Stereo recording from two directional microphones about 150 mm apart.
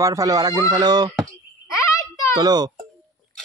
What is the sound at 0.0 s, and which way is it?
Speech, 25° right (ahead or behind).